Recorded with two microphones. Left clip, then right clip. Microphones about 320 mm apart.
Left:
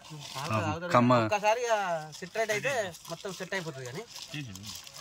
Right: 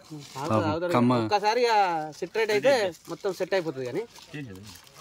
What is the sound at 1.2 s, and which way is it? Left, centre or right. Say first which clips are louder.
Speech: right 4 dB; right.